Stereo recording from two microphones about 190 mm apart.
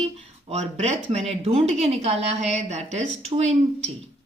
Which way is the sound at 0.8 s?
35° right (ahead or behind).